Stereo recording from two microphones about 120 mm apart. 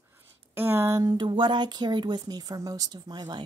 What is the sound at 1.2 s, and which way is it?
Speech, 40° right (ahead or behind).